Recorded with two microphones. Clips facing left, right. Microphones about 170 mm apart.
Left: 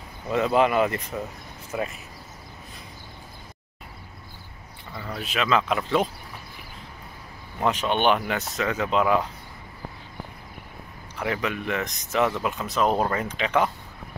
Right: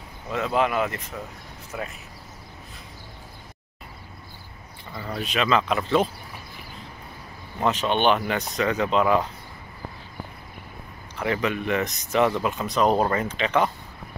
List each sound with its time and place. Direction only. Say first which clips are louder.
0.3 s speech: left 3 dB; centre (ahead or behind)
4.9 s speech: right 2 dB; centre (ahead or behind)
7.6 s speech: right 1 dB; 10° left (ahead or behind)
11.1 s speech: right 2 dB; 5° left (ahead or behind)